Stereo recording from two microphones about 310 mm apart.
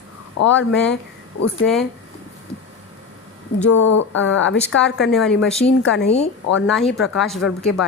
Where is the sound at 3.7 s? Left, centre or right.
Left.